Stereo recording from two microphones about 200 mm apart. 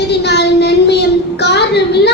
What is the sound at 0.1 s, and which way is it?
Child singing, 55° left (ahead or behind).